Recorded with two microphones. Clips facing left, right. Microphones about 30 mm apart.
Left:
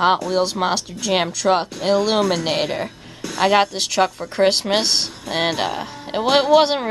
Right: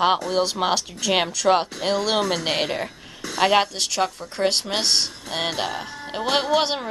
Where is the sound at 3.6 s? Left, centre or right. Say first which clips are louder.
Left 4 dB; centre.